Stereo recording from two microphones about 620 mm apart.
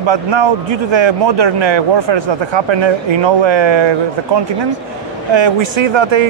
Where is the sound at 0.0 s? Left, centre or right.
Right.